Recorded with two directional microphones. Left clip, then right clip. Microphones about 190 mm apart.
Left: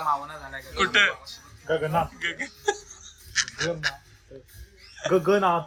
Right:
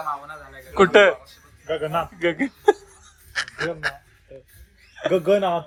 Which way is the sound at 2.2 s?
25° right (ahead or behind).